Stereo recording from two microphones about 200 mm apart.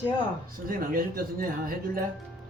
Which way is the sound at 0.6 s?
45° right (ahead or behind).